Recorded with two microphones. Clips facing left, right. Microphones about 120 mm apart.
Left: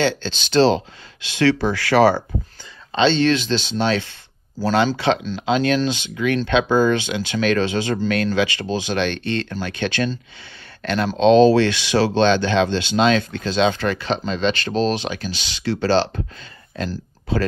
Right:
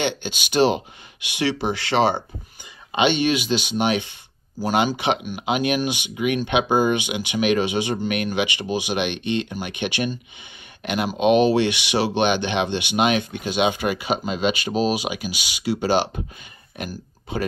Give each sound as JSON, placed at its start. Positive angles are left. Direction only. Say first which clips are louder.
{"t": 0.0, "sound": "speech", "louder": "left 4 dB", "side_deg": -15}